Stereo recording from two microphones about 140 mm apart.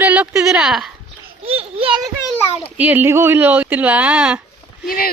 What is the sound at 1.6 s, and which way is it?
Children playing, 40° right (ahead or behind).